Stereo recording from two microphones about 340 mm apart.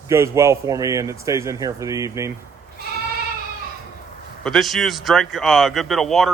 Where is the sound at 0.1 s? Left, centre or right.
Centre.